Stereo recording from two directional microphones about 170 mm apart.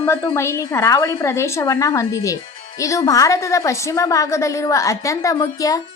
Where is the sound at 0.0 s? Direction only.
15° left (ahead or behind).